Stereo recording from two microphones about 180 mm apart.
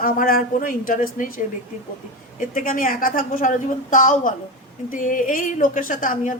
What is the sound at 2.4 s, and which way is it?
A woman's voice, 50° left (ahead or behind).